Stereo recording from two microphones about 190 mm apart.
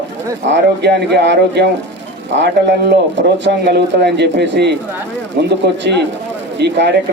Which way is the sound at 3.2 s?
70° right (ahead or behind).